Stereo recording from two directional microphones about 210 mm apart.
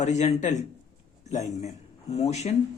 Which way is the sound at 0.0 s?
35° left (ahead or behind).